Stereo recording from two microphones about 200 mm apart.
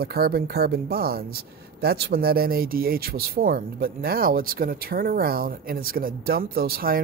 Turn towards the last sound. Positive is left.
turn(degrees=-50)  # may be behind; listen again after turning